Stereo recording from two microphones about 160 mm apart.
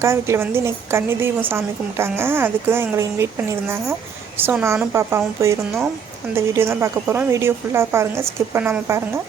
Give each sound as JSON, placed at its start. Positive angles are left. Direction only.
{"t": 0.0, "sound": "a woman's voice", "side_deg": -15}